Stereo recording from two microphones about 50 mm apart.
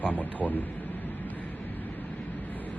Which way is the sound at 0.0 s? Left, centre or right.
Left.